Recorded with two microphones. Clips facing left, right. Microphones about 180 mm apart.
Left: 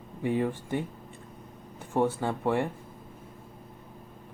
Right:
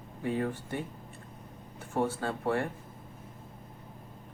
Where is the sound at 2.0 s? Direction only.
15° left (ahead or behind).